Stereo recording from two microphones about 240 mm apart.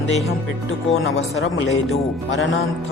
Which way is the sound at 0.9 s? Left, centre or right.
Left.